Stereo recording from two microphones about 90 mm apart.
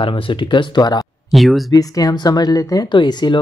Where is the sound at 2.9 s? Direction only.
55° left (ahead or behind).